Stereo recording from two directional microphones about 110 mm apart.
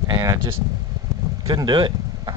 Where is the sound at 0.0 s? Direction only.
35° right (ahead or behind).